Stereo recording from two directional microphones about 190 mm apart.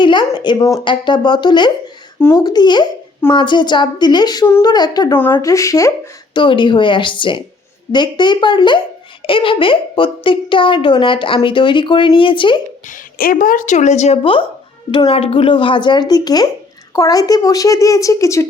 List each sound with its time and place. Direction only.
0.0 s speech: 25° left (ahead or behind)
12.9 s speech: 50° left (ahead or behind); by 18.4 s 15° left (ahead or behind)